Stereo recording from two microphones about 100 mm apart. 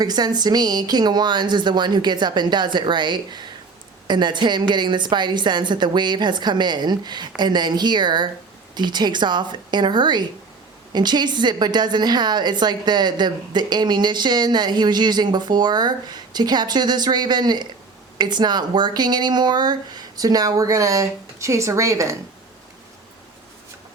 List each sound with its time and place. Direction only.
0.0 s a woman's voice: 45° right (ahead or behind)